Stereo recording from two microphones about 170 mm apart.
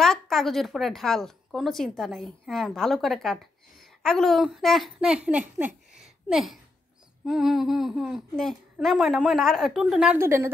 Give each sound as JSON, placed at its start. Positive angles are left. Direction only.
{"t": 0.0, "sound": "a woman's voice", "side_deg": 0}
{"t": 10.1, "sound": "a woman's voice", "side_deg": -15}